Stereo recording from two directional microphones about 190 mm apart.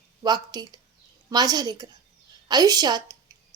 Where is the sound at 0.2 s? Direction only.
20° right (ahead or behind).